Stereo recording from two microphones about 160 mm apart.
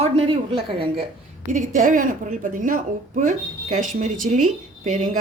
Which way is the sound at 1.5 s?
50° right (ahead or behind).